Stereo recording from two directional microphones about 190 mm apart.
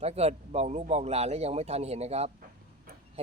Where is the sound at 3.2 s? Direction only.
30° right (ahead or behind).